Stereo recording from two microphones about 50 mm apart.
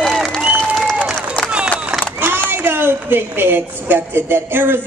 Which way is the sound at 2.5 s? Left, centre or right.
Right.